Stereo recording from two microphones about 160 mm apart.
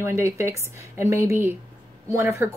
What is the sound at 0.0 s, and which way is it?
A woman's voice, 15° right (ahead or behind).